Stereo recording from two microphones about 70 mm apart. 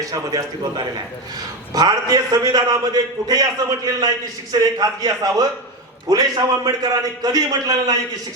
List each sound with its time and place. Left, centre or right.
0.0 s a man's voice: right
1.7 s a man's voice: right